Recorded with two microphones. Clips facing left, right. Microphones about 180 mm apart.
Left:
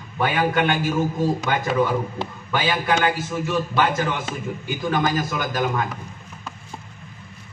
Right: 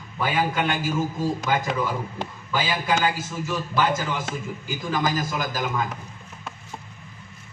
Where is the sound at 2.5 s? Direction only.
65° left (ahead or behind).